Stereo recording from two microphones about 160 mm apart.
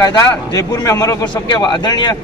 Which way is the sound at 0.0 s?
25° left (ahead or behind).